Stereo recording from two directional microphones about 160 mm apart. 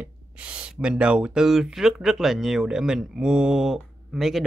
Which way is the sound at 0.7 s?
5° right (ahead or behind).